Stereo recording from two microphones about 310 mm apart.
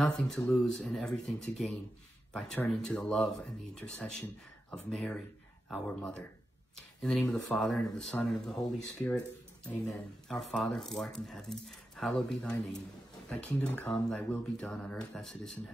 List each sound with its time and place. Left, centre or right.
0.0 s speech: centre